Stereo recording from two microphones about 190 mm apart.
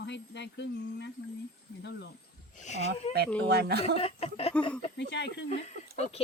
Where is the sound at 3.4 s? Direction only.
60° right (ahead or behind).